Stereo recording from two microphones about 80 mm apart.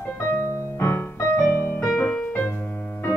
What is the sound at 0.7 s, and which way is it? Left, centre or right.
Music, left.